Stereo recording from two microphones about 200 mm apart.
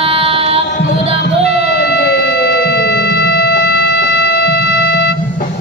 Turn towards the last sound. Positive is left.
turn(degrees=55)  # may be behind; listen again after turning